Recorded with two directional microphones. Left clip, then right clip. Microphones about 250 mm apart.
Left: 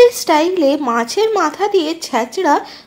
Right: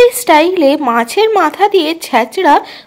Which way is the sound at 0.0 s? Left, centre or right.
Right.